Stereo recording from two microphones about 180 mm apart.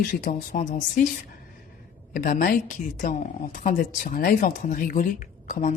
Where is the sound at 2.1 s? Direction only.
50° left (ahead or behind).